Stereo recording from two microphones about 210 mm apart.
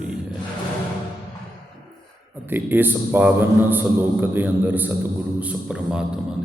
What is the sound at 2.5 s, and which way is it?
A man's voice, 10° right (ahead or behind).